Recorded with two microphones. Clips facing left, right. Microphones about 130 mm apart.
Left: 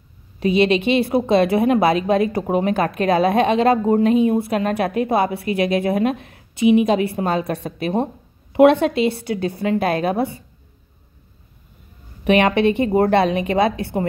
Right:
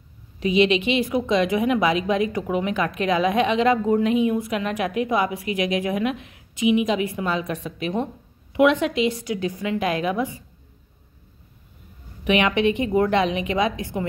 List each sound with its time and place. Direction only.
0.4 s speech: 40° left (ahead or behind)
12.3 s speech: 40° left (ahead or behind)